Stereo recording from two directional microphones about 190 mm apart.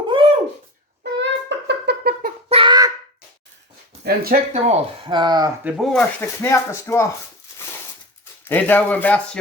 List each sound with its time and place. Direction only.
0.1 s a sound: 30° right (ahead or behind)
1.2 s a sound: 65° right (ahead or behind)
2.5 s child singing: 25° right (ahead or behind)
4.0 s speech: 50° right (ahead or behind)
4.5 s speech: 30° right (ahead or behind)
5.6 s speech: centre (ahead or behind)
8.4 s speech: 10° left (ahead or behind)